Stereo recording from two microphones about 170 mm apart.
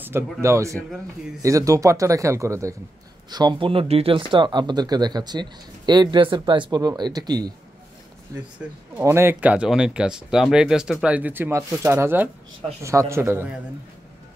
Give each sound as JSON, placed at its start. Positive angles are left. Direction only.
{"t": 0.0, "sound": "speech", "side_deg": -15}
{"t": 8.9, "sound": "speech", "side_deg": -15}